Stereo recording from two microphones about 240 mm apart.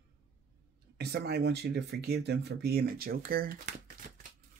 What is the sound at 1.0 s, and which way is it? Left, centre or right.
Speech, right.